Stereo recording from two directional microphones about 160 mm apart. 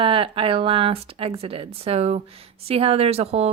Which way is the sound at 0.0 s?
35° right (ahead or behind).